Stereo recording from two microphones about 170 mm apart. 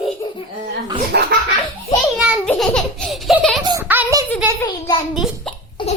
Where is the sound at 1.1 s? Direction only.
90° right.